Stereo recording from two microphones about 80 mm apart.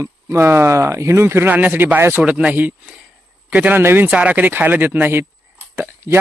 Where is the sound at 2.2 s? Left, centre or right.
Centre.